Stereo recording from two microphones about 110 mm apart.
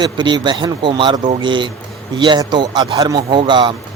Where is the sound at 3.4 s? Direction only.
45° right (ahead or behind).